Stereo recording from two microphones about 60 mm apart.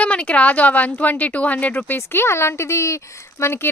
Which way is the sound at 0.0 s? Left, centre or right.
Left.